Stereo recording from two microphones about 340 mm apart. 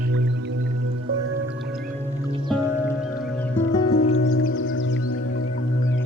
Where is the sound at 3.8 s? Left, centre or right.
Left.